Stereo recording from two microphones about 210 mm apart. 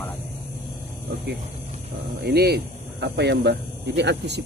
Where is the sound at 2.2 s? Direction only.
50° right (ahead or behind).